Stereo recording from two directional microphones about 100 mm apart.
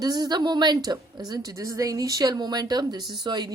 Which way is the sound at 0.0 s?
40° right (ahead or behind).